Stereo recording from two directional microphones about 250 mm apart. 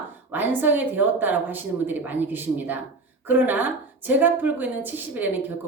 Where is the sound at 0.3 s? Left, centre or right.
Centre.